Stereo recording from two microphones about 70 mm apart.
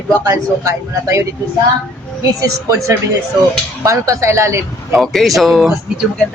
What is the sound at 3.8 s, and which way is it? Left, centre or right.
Speech, right.